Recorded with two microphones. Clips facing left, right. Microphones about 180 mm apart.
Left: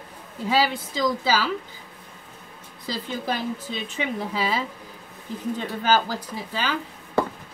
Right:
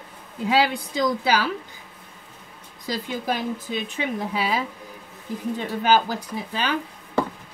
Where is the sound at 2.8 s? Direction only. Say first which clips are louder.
Right 2 dB; 15° right (ahead or behind).